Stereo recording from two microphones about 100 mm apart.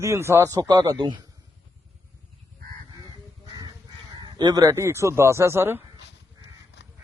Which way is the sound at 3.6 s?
40° right (ahead or behind).